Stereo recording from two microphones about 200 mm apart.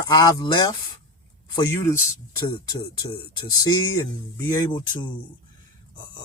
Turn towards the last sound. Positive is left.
turn(degrees=20)  # may be behind; listen again after turning